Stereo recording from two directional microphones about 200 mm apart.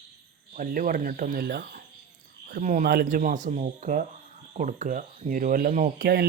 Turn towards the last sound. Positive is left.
turn(degrees=-50)  # may be behind; listen again after turning